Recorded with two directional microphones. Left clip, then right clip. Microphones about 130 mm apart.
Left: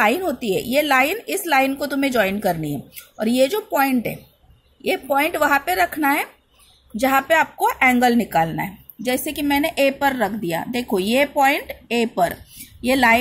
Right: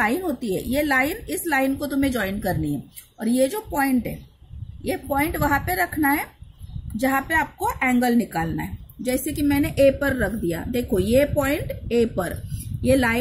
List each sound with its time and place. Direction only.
0.0 s a woman's voice: 30° left (ahead or behind)